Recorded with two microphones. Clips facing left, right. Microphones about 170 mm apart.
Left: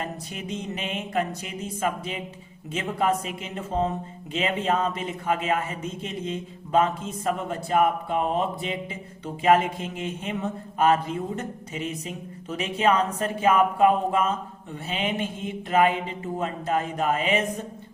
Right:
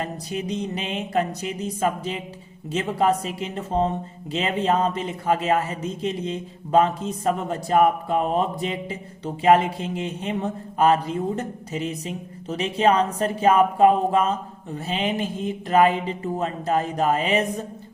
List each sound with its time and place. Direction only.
0.0 s speech: 35° right (ahead or behind)